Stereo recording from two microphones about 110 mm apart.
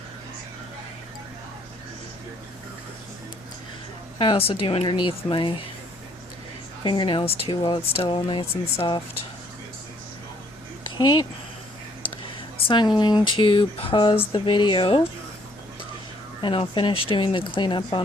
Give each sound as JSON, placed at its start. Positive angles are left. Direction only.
{"t": 4.2, "sound": "speech", "side_deg": 55}
{"t": 6.8, "sound": "speech", "side_deg": 45}
{"t": 10.9, "sound": "speech", "side_deg": 40}
{"t": 12.6, "sound": "speech", "side_deg": 45}
{"t": 16.4, "sound": "speech", "side_deg": 50}